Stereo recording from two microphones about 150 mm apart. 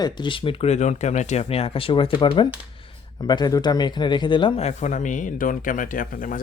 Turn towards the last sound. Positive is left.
turn(degrees=65)  # may be behind; listen again after turning